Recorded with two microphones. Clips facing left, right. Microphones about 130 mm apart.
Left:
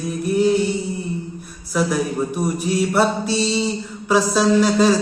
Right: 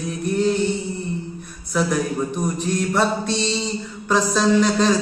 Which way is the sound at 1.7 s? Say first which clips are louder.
Left 1 dB; 5° left (ahead or behind).